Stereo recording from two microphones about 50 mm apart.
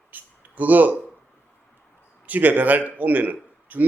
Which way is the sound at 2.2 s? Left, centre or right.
Right.